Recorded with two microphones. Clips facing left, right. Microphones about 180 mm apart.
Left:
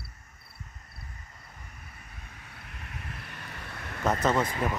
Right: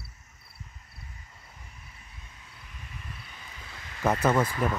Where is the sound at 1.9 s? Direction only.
60° left (ahead or behind).